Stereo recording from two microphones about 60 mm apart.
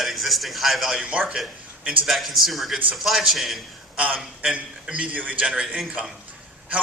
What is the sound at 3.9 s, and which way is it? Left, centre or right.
A man's voice, right.